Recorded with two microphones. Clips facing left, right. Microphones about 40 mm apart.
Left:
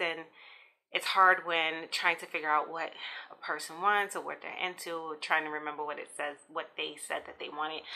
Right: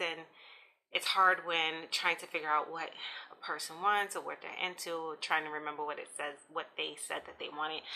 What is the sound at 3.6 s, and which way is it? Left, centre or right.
Speech, left.